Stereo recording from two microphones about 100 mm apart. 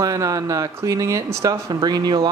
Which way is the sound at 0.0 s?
35° right (ahead or behind).